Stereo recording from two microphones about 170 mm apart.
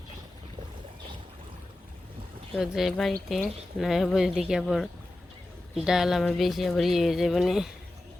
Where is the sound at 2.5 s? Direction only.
Centre (ahead or behind).